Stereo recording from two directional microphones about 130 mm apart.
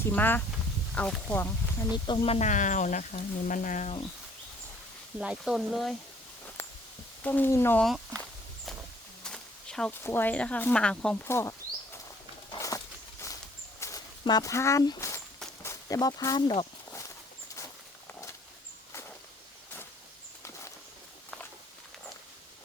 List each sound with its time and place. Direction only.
0.1 s speech: 15° left (ahead or behind)
2.2 s speech: 50° left (ahead or behind)
2.5 s speech: 75° left (ahead or behind)
5.2 s speech: 5° right (ahead or behind)
6.6 s a sound: 20° left (ahead or behind)
7.2 s speech: 15° left (ahead or behind)
7.8 s speech: 5° left (ahead or behind)
9.2 s a sound: 5° left (ahead or behind)
10.0 s speech: 15° left (ahead or behind)
11.3 s speech: 20° left (ahead or behind)
12.5 s walk: 25° left (ahead or behind)
15.6 s speech: 25° left (ahead or behind)